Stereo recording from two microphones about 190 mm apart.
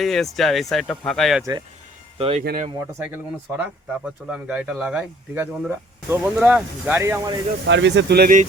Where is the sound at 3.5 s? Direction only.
15° right (ahead or behind).